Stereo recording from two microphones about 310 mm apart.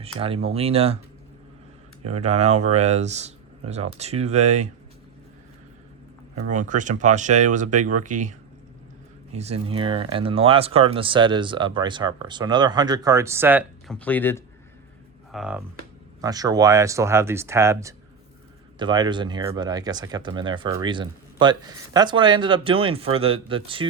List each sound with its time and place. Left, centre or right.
0.0 s speech: centre
2.0 s speech: right
6.5 s speech: right